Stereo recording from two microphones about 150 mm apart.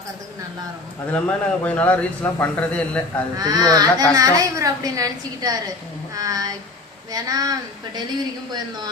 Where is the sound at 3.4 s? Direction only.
25° right (ahead or behind).